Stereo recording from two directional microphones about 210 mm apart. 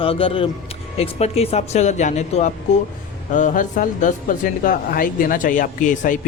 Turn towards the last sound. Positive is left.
turn(degrees=40)  # may be behind; listen again after turning